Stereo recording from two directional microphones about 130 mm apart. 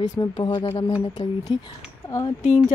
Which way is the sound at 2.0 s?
30° left (ahead or behind).